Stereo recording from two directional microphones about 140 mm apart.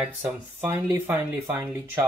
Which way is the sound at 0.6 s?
15° right (ahead or behind).